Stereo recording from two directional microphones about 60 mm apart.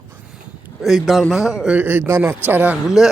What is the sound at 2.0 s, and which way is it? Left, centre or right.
Speech, right.